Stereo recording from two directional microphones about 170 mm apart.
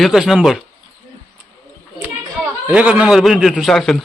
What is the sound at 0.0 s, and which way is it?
Speech, centre (ahead or behind).